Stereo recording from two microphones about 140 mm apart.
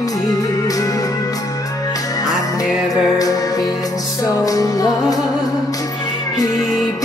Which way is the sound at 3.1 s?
25° left (ahead or behind).